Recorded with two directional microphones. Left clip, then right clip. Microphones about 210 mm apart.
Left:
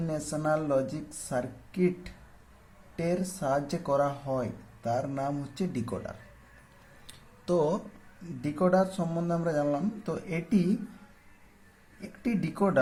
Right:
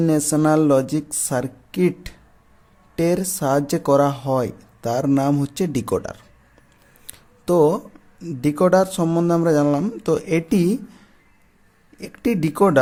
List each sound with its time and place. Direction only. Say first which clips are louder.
0.0 s speech: right 13 dB; 50° right (ahead or behind)
7.1 s music: right 10 dB; 40° right (ahead or behind)
8.2 s speech: right 11 dB; 50° right (ahead or behind)
11.9 s speech: right 11 dB; 50° right (ahead or behind)